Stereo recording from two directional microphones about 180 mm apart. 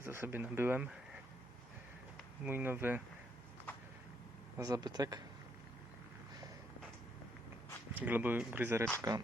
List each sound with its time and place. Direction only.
0.0 s speech: 10° right (ahead or behind)
2.4 s speech: 10° right (ahead or behind)
4.5 s speech: 20° right (ahead or behind)
8.0 s speech: 10° right (ahead or behind)